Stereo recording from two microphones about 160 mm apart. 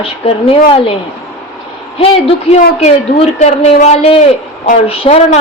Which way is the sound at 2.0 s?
40° left (ahead or behind).